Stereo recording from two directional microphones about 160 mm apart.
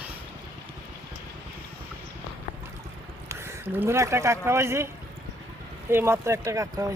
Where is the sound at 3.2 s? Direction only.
15° right (ahead or behind).